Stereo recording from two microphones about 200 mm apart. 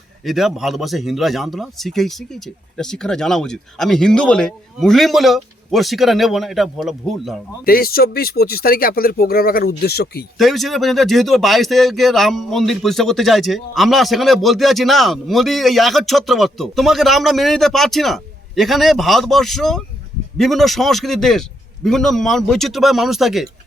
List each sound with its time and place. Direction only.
0.3 s speech: centre (ahead or behind)
7.6 s speech: 50° left (ahead or behind)
10.3 s speech: centre (ahead or behind)